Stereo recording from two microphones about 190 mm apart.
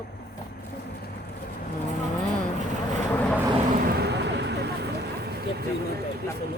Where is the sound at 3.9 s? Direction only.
60° right (ahead or behind).